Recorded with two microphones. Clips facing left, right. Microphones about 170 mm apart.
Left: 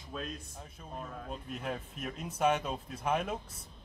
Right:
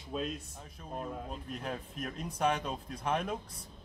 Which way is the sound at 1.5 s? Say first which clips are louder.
Left 2 dB; 5° left (ahead or behind).